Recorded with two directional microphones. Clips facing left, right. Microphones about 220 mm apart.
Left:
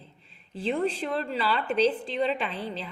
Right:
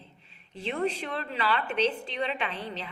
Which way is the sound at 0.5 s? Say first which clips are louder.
Left 3 dB; 30° left (ahead or behind).